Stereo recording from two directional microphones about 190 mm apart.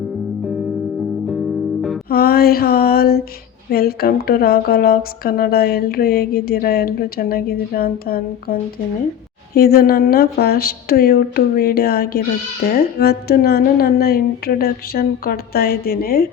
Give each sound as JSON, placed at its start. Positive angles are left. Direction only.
{"t": 2.0, "sound": "a woman's voice", "side_deg": 55}
{"t": 9.6, "sound": "a woman's voice", "side_deg": 55}